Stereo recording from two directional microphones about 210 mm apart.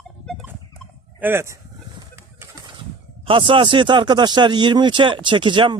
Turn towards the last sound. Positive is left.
turn(degrees=-25)  # may be behind; listen again after turning